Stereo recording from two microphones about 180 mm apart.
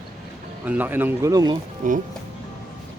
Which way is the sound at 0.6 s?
10° right (ahead or behind).